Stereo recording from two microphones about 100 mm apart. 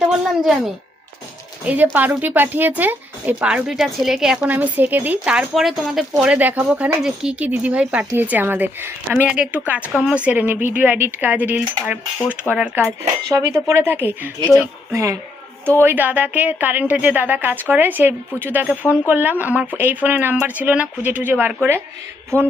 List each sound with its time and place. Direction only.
1.6 s speech: 15° right (ahead or behind)
4.4 s speech: 15° right (ahead or behind)
12.8 s speech: 30° right (ahead or behind)
15.8 s speech: 20° right (ahead or behind)